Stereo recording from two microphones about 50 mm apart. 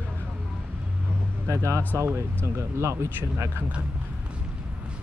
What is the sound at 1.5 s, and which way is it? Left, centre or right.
Speech, right.